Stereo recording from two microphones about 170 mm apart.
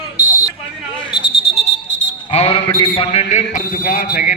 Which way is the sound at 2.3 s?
35° left (ahead or behind).